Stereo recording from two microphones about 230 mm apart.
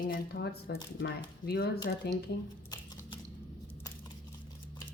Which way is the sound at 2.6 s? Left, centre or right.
Centre.